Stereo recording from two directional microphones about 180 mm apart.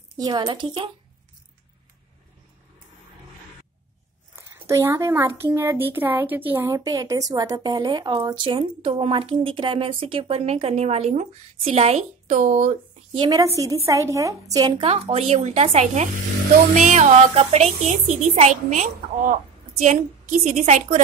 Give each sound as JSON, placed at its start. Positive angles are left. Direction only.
{"t": 0.2, "sound": "speech", "side_deg": -25}
{"t": 4.4, "sound": "speech", "side_deg": -15}
{"t": 13.1, "sound": "a woman's voice", "side_deg": -20}
{"t": 14.9, "sound": "speech", "side_deg": -35}